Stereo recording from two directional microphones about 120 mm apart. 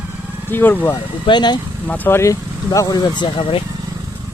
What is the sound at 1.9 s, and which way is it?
Speech, 15° left (ahead or behind).